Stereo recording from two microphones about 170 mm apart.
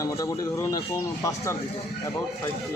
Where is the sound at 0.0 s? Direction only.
20° left (ahead or behind).